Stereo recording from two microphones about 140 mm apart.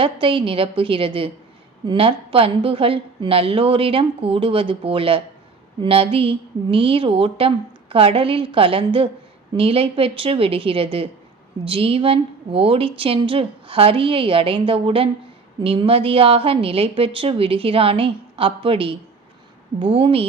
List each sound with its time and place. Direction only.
0.0 s a woman's voice: 35° right (ahead or behind)